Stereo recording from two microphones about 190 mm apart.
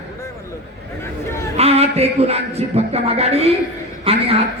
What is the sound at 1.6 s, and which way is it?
A man's voice, 30° right (ahead or behind).